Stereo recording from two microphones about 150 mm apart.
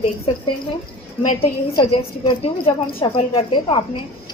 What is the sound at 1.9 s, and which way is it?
A woman's voice, 40° left (ahead or behind).